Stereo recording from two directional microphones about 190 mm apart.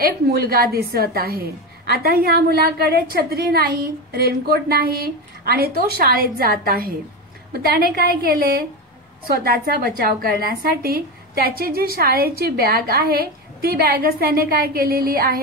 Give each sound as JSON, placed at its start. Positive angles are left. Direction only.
{"t": 0.0, "sound": "a woman's voice", "side_deg": -55}